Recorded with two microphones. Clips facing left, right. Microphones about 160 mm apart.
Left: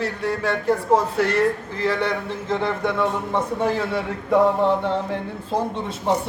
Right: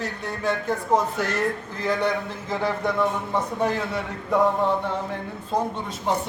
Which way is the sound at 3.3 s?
25° left (ahead or behind).